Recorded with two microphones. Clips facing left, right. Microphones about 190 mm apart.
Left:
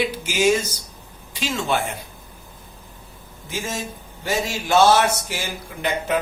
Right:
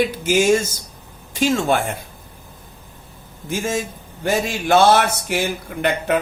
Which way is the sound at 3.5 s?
50° right (ahead or behind).